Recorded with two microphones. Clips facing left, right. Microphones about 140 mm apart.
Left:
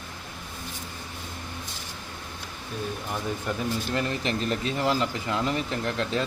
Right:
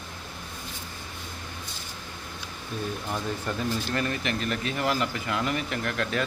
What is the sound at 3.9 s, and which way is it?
Speech, 20° left (ahead or behind).